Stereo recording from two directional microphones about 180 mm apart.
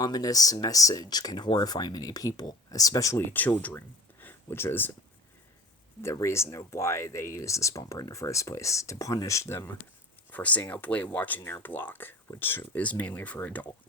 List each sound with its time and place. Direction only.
0.0 s speech: 20° left (ahead or behind)
6.0 s speech: 15° left (ahead or behind)